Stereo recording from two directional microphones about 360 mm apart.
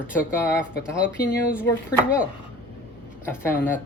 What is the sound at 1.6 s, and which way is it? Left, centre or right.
Speech, centre.